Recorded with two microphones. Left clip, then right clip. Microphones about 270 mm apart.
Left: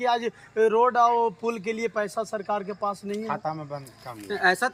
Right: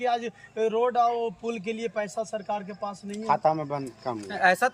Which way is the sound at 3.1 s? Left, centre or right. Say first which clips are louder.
Right 4 dB; right.